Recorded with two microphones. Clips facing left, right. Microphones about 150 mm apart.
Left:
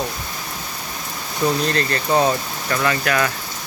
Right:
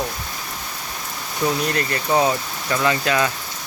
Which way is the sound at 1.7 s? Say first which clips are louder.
Left 1 dB; 15° right (ahead or behind).